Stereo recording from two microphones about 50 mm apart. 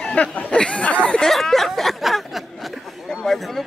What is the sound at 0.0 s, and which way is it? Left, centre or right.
Speech, left.